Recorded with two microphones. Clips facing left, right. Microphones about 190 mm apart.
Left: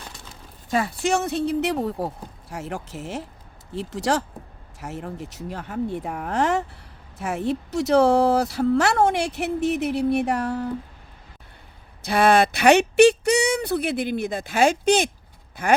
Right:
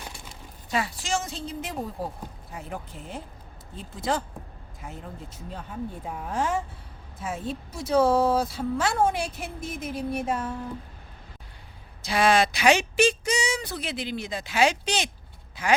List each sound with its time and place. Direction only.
0.7 s a woman's voice: 50° left (ahead or behind); by 10.7 s 75° left (ahead or behind)
12.0 s speech: 60° left (ahead or behind)